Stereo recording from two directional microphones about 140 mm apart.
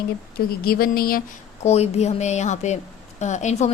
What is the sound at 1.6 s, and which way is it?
A woman's voice, 50° left (ahead or behind).